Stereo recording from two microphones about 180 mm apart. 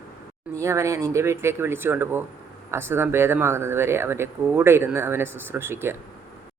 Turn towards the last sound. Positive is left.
turn(degrees=-15)  # may be behind; listen again after turning